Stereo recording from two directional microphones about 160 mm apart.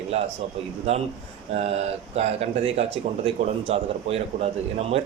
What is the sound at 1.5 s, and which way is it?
Speech, 40° right (ahead or behind).